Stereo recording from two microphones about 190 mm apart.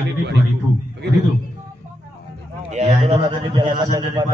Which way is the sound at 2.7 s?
35° right (ahead or behind).